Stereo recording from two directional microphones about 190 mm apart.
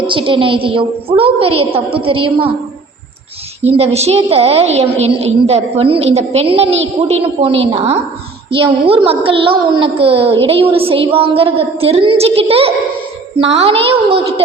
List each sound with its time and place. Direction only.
0.1 s a woman's voice: 25° right (ahead or behind)
3.6 s a woman's voice: 35° right (ahead or behind)